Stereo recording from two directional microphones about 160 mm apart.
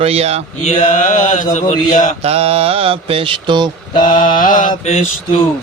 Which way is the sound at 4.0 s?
55° left (ahead or behind).